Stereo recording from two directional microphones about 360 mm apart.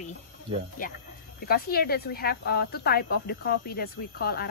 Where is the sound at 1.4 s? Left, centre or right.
Left.